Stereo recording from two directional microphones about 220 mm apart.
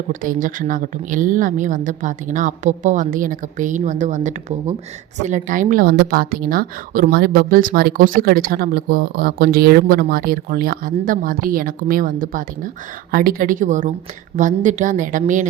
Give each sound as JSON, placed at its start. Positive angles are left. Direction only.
{"t": 0.1, "sound": "a woman's voice", "side_deg": -40}